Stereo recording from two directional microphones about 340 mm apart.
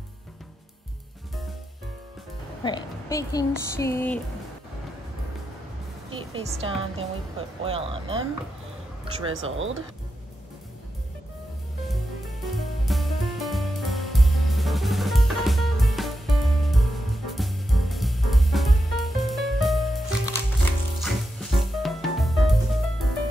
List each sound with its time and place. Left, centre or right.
2.6 s speech: centre
6.1 s a woman's voice: centre
9.3 s speech: right
12.5 s music: centre